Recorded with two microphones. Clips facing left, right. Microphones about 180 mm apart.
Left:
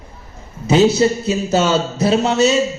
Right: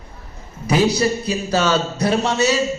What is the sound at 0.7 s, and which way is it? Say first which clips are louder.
Speech: left 4 dB; 25° left (ahead or behind).